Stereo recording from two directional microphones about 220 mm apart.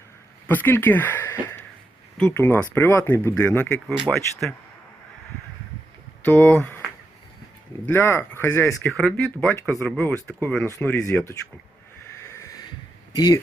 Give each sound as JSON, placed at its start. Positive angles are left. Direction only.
{"t": 0.4, "sound": "speech", "side_deg": 10}
{"t": 6.2, "sound": "speech", "side_deg": 5}
{"t": 7.9, "sound": "speech", "side_deg": 10}
{"t": 13.1, "sound": "speech", "side_deg": 15}